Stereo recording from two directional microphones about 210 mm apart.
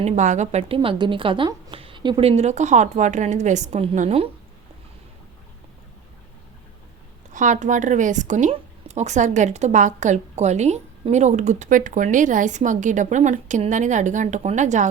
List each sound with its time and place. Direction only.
0.0 s speech: 35° right (ahead or behind)
7.3 s speech: 35° right (ahead or behind)